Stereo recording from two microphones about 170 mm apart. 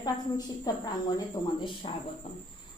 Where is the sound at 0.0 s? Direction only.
25° left (ahead or behind).